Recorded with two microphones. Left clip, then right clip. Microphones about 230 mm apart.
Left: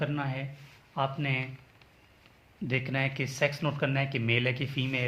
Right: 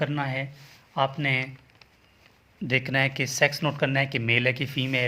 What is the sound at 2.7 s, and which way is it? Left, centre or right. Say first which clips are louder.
Speech: right 7 dB; right.